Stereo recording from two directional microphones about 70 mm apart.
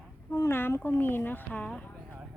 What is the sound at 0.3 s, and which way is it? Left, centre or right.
Speech, left.